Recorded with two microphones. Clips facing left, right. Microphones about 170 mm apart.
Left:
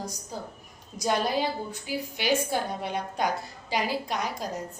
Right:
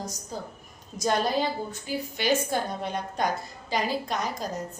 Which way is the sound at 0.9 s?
10° left (ahead or behind).